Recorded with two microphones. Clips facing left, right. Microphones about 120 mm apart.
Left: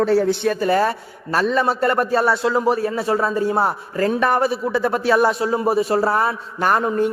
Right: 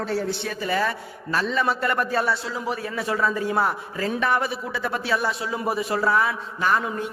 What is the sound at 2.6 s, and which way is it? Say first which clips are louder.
A man's voice: left 8 dB; 40° left (ahead or behind).